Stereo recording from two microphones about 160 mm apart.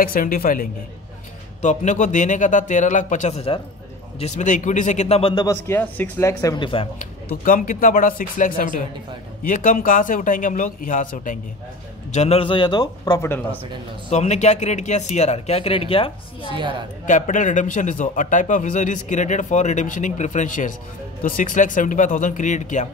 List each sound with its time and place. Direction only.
0.0 s a man's voice: 60° left (ahead or behind)
1.6 s a man's voice: 50° left (ahead or behind)
4.2 s a man's voice: 50° left (ahead or behind)
5.3 s a man's voice: 20° left (ahead or behind)
7.0 s a man's voice: 60° left (ahead or behind)
12.1 s a man's voice: 40° left (ahead or behind); by 13.3 s 25° left (ahead or behind)
14.1 s a man's voice: 45° left (ahead or behind)
16.4 s a woman's voice: 30° right (ahead or behind)
17.0 s a man's voice: 55° left (ahead or behind)